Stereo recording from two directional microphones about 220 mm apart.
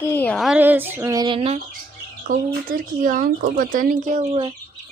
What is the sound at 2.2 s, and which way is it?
Speech, 40° right (ahead or behind).